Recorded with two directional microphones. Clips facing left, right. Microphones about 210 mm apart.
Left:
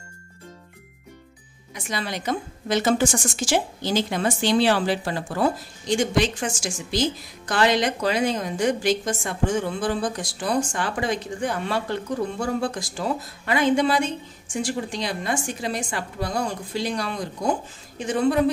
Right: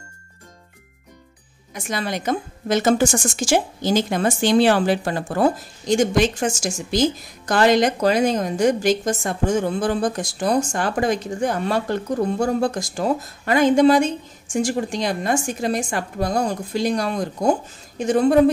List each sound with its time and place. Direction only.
1.7 s a woman's voice: 45° right (ahead or behind)